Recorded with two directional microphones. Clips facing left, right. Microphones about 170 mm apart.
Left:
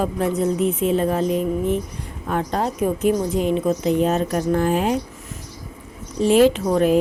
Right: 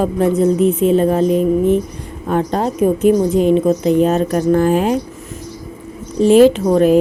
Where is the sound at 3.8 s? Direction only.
45° right (ahead or behind).